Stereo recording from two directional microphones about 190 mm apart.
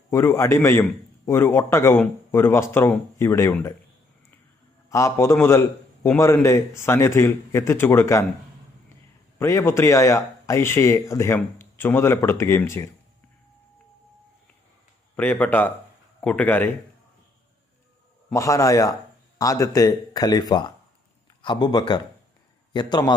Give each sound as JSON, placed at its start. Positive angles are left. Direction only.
{"t": 0.1, "sound": "a man's voice", "side_deg": 15}
{"t": 4.9, "sound": "a man's voice", "side_deg": 15}
{"t": 9.4, "sound": "a man's voice", "side_deg": 15}
{"t": 15.1, "sound": "a man's voice", "side_deg": 10}
{"t": 18.3, "sound": "a man's voice", "side_deg": 15}